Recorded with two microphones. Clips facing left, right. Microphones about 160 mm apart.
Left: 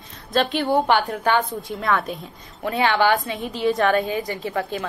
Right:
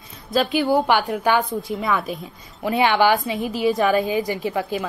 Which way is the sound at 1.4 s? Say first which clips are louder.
Right 2 dB; centre (ahead or behind).